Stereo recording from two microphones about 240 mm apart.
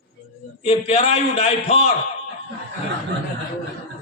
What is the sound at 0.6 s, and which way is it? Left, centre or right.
A man's voice, left.